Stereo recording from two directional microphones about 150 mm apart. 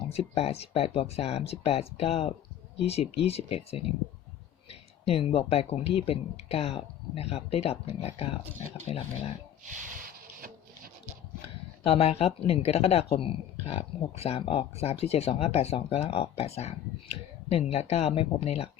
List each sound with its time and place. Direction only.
0.1 s speech: 45° left (ahead or behind)
11.8 s speech: 40° left (ahead or behind)